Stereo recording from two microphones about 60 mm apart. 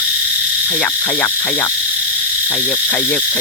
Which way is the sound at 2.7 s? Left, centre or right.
Left.